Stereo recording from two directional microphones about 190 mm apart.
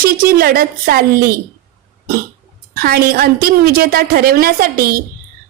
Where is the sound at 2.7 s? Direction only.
50° right (ahead or behind).